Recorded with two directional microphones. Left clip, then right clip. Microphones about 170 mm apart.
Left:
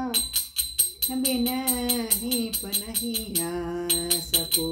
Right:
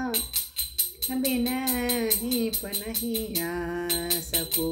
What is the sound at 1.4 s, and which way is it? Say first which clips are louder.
Music: left 1 dB; 20° right (ahead or behind).